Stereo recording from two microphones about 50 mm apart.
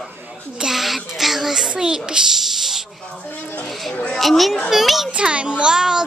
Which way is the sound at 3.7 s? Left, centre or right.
Centre.